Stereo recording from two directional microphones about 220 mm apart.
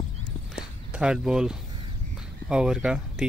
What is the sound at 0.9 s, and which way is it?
Speech, 5° right (ahead or behind).